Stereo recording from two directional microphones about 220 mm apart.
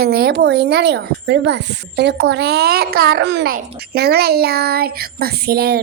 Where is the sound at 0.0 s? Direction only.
45° right (ahead or behind).